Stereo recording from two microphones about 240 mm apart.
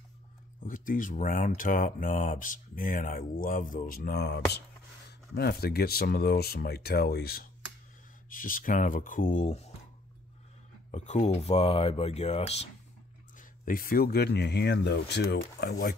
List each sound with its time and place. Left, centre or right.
0.7 s speech: left
10.9 s speech: left